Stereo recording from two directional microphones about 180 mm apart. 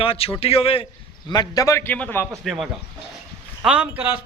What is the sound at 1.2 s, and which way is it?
A man's voice, 20° left (ahead or behind).